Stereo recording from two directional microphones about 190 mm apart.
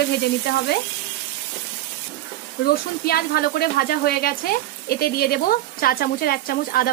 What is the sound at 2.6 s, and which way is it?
Speech, 55° left (ahead or behind).